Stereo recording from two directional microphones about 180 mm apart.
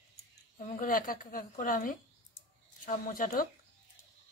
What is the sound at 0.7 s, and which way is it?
A woman's voice, 50° left (ahead or behind).